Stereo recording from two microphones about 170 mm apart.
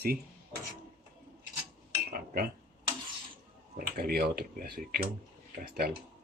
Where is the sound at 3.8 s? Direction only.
65° right (ahead or behind).